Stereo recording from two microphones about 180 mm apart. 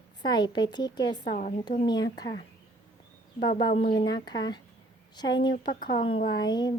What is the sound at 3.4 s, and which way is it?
A woman's voice, 25° left (ahead or behind).